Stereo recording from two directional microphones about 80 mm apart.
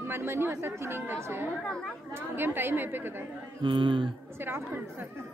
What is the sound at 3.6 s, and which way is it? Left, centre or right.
Speech, right.